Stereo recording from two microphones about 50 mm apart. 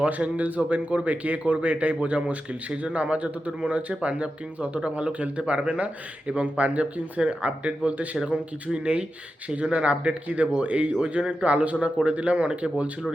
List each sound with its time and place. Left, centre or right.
0.0 s speech: right